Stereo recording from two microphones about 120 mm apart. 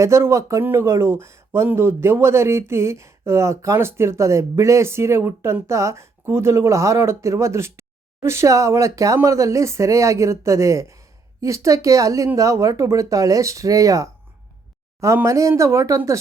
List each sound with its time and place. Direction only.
0.0 s speech: 25° right (ahead or behind)